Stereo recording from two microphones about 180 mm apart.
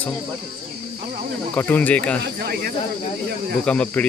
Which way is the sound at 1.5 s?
10° left (ahead or behind).